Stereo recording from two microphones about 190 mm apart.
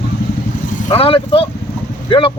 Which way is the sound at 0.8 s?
30° left (ahead or behind).